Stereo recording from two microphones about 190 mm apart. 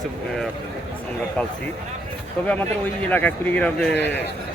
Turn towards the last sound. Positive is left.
turn(degrees=5)  # may be behind; listen again after turning